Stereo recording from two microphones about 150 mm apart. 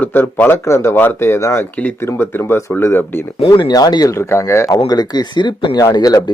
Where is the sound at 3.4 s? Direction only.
30° left (ahead or behind).